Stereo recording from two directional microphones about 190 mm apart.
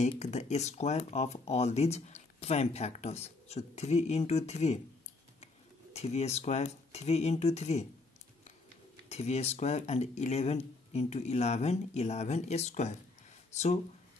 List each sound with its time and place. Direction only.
0.1 s speech: 35° left (ahead or behind)
5.9 s speech: 35° left (ahead or behind)
9.1 s speech: 35° left (ahead or behind)